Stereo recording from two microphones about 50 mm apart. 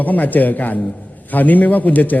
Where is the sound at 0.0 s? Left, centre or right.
Left.